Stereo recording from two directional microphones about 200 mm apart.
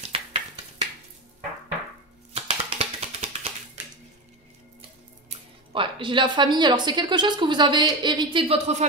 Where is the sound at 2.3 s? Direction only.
30° right (ahead or behind).